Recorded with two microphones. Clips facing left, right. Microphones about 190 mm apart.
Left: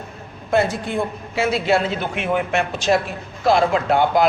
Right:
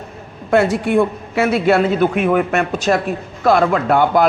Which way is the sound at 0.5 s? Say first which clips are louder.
Right 6 dB; 70° right (ahead or behind).